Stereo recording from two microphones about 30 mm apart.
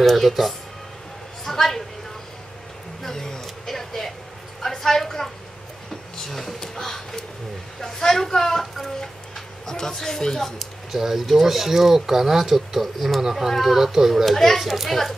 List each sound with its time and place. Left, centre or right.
0.0 s speech: centre
1.4 s a woman's voice: centre
3.0 s a woman's voice: centre
11.0 s speech: centre
12.8 s a woman's voice: centre